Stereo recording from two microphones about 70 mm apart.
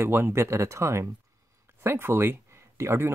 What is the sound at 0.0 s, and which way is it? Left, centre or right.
Speech, right.